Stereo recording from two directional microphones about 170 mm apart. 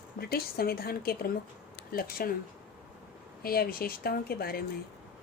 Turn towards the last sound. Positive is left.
turn(degrees=65)  # may be behind; listen again after turning